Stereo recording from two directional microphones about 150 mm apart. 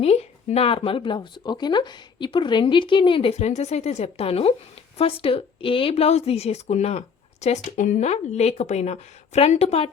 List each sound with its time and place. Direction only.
0.0 s speech: 45° left (ahead or behind)